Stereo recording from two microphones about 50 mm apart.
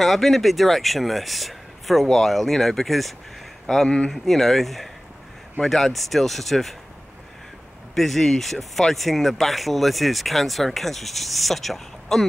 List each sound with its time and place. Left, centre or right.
0.0 s speech: centre
7.9 s speech: centre